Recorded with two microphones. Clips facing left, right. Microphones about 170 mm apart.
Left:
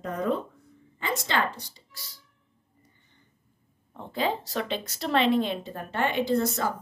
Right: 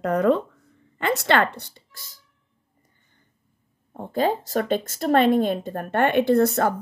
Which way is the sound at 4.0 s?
45° right (ahead or behind).